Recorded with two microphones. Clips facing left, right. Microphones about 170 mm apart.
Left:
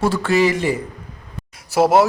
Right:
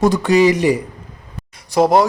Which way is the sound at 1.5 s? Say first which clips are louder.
Right 1 dB; 5° left (ahead or behind).